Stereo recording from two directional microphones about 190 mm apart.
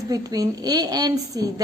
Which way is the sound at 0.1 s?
20° right (ahead or behind).